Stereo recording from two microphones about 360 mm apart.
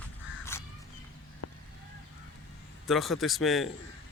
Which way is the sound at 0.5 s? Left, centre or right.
Centre.